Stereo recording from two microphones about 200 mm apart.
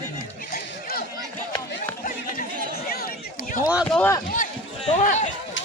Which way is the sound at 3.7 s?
5° right (ahead or behind).